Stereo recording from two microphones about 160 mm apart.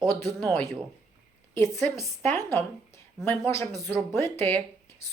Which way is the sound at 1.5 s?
15° left (ahead or behind).